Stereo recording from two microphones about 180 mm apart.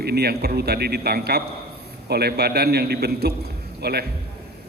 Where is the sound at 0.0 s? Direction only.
60° right (ahead or behind).